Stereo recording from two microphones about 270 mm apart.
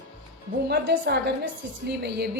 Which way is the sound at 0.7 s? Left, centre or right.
Right.